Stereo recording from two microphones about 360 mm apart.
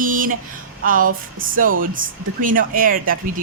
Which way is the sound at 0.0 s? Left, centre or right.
Right.